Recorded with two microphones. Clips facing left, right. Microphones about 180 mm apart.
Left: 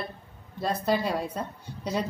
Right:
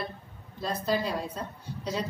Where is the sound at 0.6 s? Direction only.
55° left (ahead or behind).